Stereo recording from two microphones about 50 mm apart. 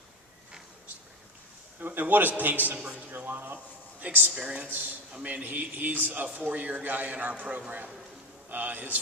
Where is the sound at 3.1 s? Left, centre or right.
Right.